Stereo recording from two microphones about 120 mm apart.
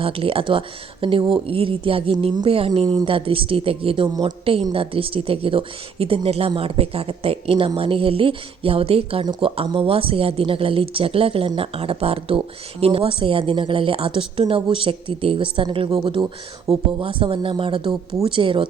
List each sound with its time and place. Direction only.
0.0 s speech: 50° right (ahead or behind)
16.2 s speech: centre (ahead or behind)
16.7 s speech: 60° right (ahead or behind)
17.0 s speech: 45° right (ahead or behind)